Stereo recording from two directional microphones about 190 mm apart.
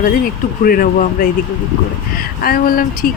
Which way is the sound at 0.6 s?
50° left (ahead or behind).